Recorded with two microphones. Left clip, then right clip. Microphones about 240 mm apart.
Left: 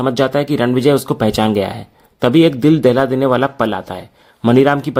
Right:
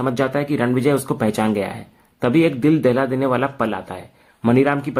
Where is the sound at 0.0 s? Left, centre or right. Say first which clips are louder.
Left 5 dB; left.